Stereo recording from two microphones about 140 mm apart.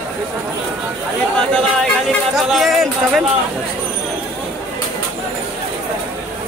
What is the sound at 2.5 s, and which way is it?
Speech, centre (ahead or behind).